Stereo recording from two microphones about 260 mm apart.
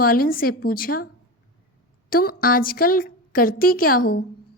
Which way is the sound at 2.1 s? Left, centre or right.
Left.